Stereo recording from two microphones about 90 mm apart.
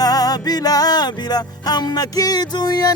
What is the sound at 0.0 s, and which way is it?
Music, 45° left (ahead or behind).